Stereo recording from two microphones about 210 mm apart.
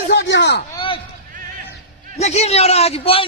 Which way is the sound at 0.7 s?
25° left (ahead or behind).